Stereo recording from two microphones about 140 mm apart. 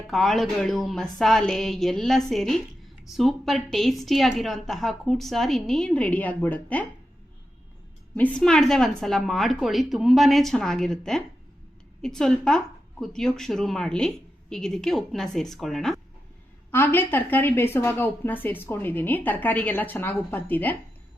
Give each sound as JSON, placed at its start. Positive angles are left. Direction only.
{"t": 0.1, "sound": "a woman's voice", "side_deg": 0}
{"t": 8.1, "sound": "a woman's voice", "side_deg": 10}
{"t": 16.7, "sound": "a woman's voice", "side_deg": 15}